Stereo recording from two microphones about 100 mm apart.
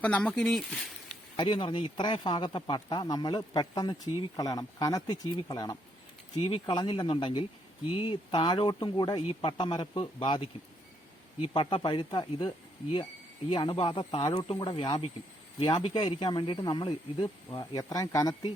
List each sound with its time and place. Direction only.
0.0 s speech: 15° left (ahead or behind)
1.5 s speech: 60° left (ahead or behind)
17.6 s speech: 40° left (ahead or behind)